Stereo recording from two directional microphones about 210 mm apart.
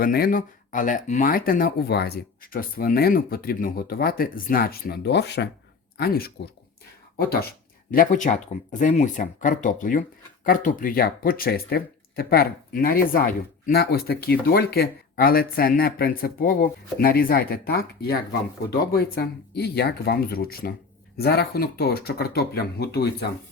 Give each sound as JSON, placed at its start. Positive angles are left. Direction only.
{"t": 0.0, "sound": "speech", "side_deg": 45}